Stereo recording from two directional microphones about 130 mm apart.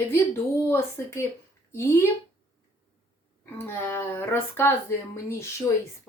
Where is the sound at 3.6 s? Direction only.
20° left (ahead or behind).